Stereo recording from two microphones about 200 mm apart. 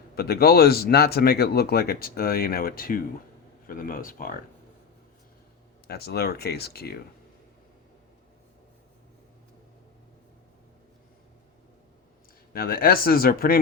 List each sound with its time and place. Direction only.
0.2 s speech: 50° left (ahead or behind)
5.9 s speech: 50° left (ahead or behind)
12.5 s speech: 50° left (ahead or behind)